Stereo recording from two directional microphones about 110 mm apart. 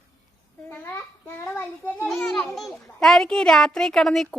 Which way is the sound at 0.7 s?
20° left (ahead or behind).